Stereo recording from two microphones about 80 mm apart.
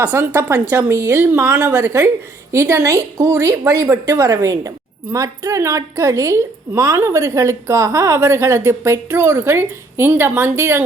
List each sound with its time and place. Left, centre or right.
0.0 s a woman's voice: right